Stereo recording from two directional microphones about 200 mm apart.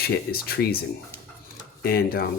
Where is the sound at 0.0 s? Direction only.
50° left (ahead or behind).